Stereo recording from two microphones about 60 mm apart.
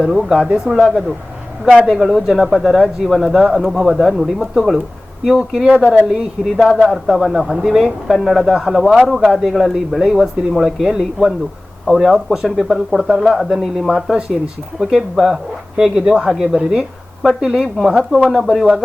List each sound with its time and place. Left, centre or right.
0.0 s speech: centre
1.6 s speech: right
2.0 s speech: centre
5.6 s speech: centre
6.7 s speech: centre